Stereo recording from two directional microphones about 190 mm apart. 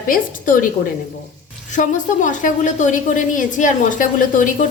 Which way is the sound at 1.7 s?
40° left (ahead or behind).